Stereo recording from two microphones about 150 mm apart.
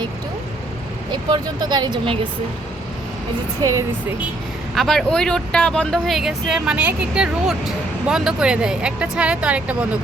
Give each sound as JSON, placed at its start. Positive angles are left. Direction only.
{"t": 1.1, "sound": "speech", "side_deg": -30}
{"t": 3.6, "sound": "speech", "side_deg": -20}
{"t": 4.7, "sound": "speech", "side_deg": 0}